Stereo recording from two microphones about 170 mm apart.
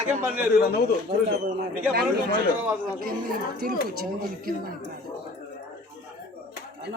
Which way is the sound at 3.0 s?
60° right (ahead or behind).